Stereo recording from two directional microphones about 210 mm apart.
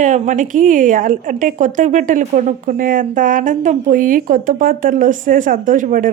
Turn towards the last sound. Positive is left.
turn(degrees=-40)  # may be behind; listen again after turning